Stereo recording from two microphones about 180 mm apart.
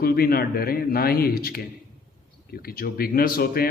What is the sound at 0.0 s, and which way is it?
A man's voice, 55° left (ahead or behind).